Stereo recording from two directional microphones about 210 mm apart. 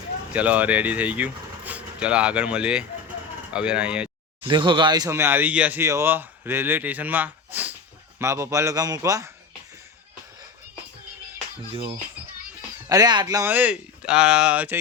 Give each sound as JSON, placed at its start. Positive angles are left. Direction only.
{"t": 0.3, "sound": "speech", "side_deg": -5}
{"t": 4.4, "sound": "speech", "side_deg": -20}
{"t": 11.7, "sound": "speech", "side_deg": -25}